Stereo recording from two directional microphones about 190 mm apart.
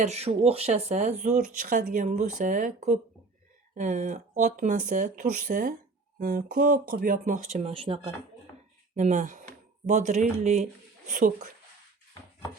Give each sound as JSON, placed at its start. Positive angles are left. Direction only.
{"t": 0.0, "sound": "speech", "side_deg": -35}
{"t": 9.0, "sound": "speech", "side_deg": -40}